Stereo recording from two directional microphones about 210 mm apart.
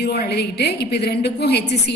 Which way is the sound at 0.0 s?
50° left (ahead or behind).